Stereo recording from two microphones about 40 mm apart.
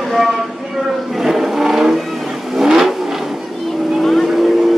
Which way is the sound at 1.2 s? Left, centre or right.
Centre.